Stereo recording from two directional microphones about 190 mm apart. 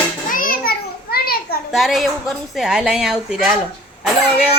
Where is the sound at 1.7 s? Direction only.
Centre (ahead or behind).